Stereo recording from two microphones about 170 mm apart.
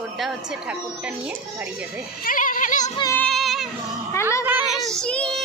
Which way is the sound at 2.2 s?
55° left (ahead or behind).